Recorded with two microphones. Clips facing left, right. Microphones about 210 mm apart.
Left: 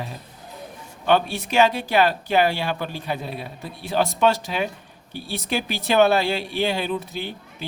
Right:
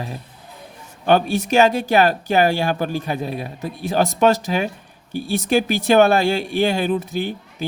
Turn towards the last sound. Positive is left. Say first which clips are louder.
# right 6 dB
turn(degrees=-45)  # may be behind; listen again after turning